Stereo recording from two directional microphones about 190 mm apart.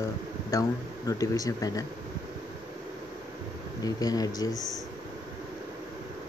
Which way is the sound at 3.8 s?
20° left (ahead or behind).